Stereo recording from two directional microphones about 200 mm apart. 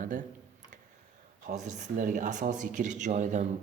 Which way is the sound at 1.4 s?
35° right (ahead or behind).